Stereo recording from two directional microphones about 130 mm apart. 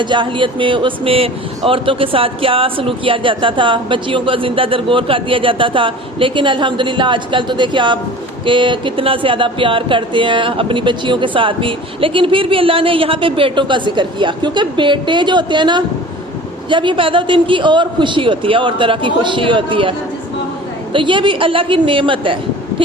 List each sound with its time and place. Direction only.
0.0 s speech: 40° right (ahead or behind)
20.9 s speech: 40° right (ahead or behind)